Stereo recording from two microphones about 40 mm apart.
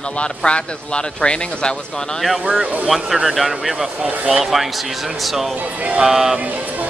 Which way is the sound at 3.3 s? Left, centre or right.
Centre.